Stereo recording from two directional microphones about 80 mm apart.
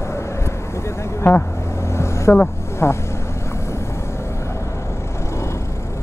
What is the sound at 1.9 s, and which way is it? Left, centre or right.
Vehicle, left.